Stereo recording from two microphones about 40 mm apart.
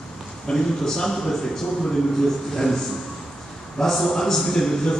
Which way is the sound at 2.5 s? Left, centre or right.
Centre.